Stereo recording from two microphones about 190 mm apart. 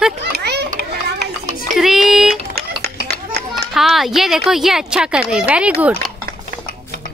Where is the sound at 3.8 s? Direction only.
Centre (ahead or behind).